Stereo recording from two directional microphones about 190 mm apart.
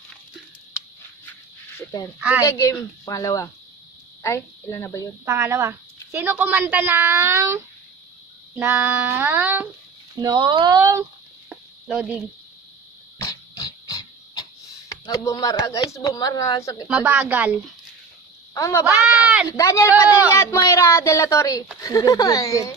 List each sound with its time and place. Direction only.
1.8 s speech: 15° left (ahead or behind)
2.1 s speech: 10° right (ahead or behind)
2.4 s a woman's voice: 15° left (ahead or behind)
5.2 s speech: 15° right (ahead or behind)
10.2 s speech: 25° right (ahead or behind)
11.4 s a sound: 5° right (ahead or behind)
13.2 s a sound: 20° left (ahead or behind)
16.8 s speech: 10° right (ahead or behind)
18.5 s speech: 15° left (ahead or behind)
18.9 s speech: 5° right (ahead or behind)
19.5 s speech: 15° left (ahead or behind)